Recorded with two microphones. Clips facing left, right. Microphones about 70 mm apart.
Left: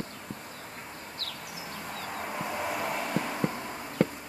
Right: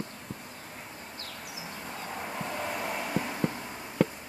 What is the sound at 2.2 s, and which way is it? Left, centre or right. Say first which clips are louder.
Vehicle: left 2 dB; centre.